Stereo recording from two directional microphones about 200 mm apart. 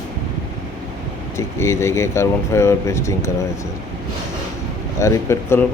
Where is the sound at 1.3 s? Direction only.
15° left (ahead or behind).